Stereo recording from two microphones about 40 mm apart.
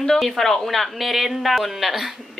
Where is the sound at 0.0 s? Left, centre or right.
Centre.